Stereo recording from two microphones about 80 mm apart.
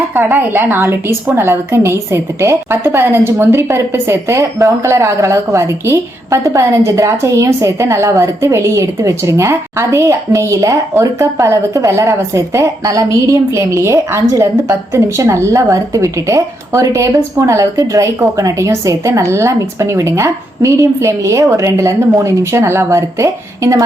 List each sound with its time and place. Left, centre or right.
0.1 s a woman's voice: right